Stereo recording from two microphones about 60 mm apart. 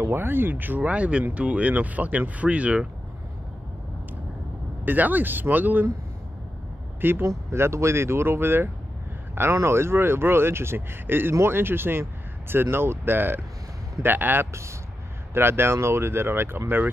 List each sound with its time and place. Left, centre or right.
0.0 s speech: right
4.8 s speech: right
7.0 s speech: right
7.5 s speech: right
14.5 s speech: right
15.3 s speech: right